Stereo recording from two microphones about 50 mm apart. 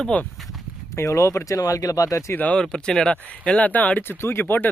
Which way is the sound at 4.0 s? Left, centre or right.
Left.